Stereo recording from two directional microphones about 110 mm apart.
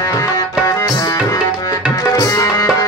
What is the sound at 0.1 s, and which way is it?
Tabla, 25° left (ahead or behind).